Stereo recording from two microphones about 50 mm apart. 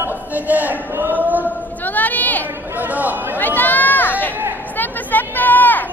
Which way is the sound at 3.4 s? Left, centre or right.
Left.